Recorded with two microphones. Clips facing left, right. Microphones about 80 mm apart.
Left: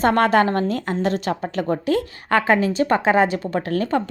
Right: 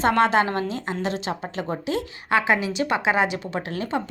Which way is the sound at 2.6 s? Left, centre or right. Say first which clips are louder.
Left 5 dB; left.